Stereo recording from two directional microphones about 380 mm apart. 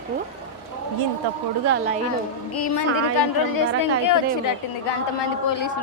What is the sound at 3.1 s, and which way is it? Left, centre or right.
Speech, left.